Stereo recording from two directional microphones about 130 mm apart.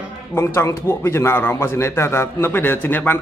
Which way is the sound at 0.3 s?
20° left (ahead or behind).